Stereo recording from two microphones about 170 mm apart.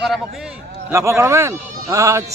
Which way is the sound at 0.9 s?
15° right (ahead or behind).